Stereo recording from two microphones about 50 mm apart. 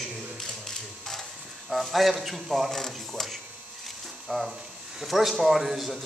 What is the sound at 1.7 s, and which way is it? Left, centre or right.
Speech, centre.